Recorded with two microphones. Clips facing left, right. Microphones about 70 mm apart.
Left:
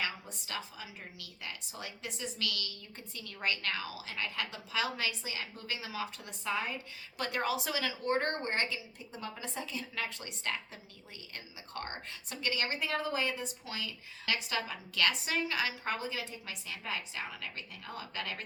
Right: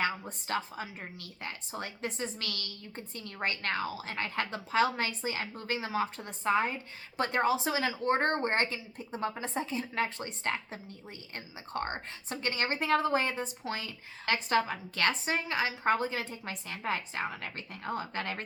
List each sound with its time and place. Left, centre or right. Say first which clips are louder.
0.0 s a woman's voice: right 6 dB; right